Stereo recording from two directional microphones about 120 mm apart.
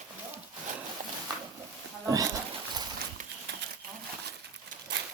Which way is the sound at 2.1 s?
30° right (ahead or behind).